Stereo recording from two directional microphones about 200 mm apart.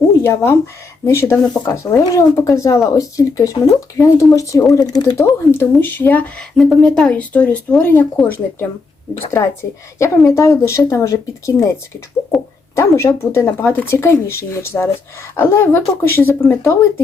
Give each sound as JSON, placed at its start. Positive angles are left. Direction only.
{"t": 0.2, "sound": "speech", "side_deg": 15}
{"t": 10.0, "sound": "speech", "side_deg": 15}
{"t": 12.7, "sound": "speech", "side_deg": 15}